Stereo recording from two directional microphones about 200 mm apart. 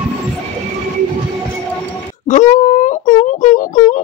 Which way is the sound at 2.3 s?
35° left (ahead or behind).